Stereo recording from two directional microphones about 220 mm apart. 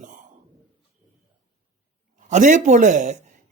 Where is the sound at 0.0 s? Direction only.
35° right (ahead or behind).